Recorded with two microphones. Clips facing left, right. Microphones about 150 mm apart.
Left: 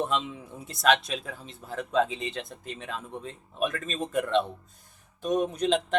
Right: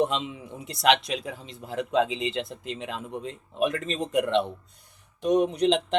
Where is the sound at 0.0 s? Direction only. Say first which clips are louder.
Right 3 dB; 20° right (ahead or behind).